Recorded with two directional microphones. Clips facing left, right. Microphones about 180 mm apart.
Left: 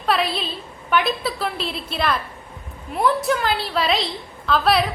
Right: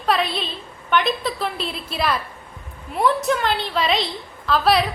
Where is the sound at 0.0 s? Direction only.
Centre (ahead or behind).